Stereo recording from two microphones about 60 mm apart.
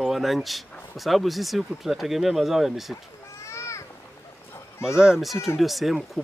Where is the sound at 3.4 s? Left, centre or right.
Left.